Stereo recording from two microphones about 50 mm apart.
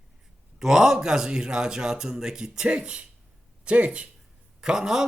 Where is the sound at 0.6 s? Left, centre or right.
Centre; by 4.0 s right.